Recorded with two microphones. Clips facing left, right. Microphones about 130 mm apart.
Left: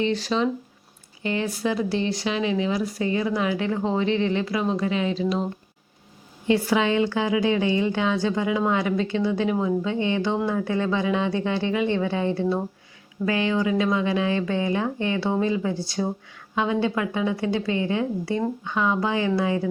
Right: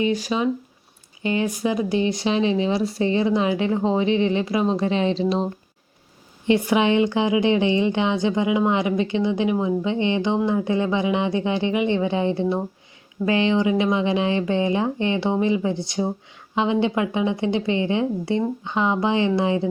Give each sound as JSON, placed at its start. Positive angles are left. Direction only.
{"t": 0.0, "sound": "a woman's voice", "side_deg": -10}
{"t": 6.5, "sound": "a woman's voice", "side_deg": -20}